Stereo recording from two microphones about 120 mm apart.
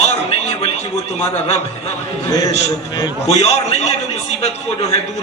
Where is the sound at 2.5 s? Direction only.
60° left (ahead or behind).